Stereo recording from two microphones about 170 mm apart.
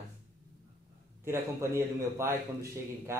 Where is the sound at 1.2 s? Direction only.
15° right (ahead or behind).